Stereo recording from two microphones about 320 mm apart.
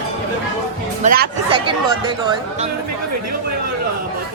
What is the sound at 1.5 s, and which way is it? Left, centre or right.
Speech, centre.